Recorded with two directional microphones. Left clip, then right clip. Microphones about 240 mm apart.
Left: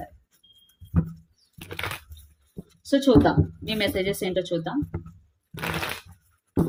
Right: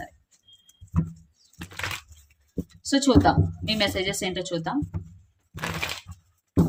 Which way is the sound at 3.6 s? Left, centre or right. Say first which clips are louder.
Right 2 dB; centre.